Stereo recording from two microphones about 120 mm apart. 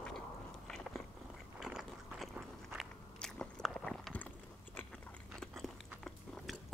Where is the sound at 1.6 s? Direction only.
5° right (ahead or behind).